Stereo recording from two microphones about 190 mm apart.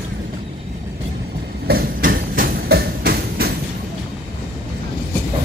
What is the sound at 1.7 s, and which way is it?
Train, 50° right (ahead or behind).